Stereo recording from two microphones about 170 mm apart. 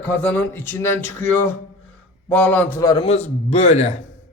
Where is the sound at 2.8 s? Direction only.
30° left (ahead or behind).